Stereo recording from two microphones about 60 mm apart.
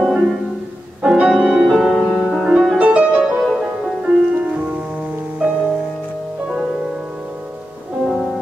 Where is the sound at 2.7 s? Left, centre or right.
Right.